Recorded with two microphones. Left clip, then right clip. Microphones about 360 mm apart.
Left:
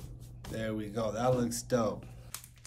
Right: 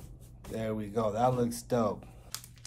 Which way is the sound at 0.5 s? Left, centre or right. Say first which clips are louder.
Right 3 dB; centre.